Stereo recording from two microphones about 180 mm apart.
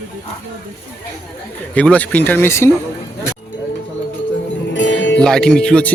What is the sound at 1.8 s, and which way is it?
Speech, 10° left (ahead or behind).